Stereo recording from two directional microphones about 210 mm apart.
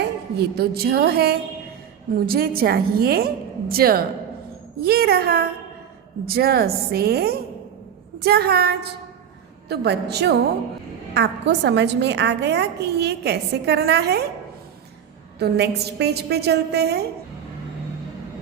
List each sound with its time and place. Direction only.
0.3 s a woman's voice: 50° right (ahead or behind)
15.4 s a woman's voice: 50° right (ahead or behind)